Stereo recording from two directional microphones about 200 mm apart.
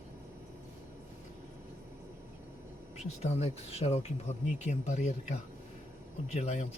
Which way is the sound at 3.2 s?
30° left (ahead or behind).